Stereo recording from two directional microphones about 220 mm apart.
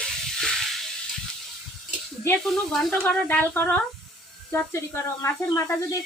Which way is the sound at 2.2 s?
Centre (ahead or behind).